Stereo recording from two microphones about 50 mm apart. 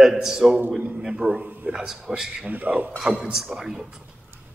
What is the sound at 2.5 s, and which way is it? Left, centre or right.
Speech, right.